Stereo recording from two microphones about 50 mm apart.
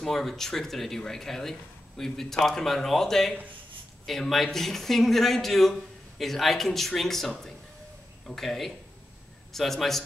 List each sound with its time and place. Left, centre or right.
0.0 s a man's voice: centre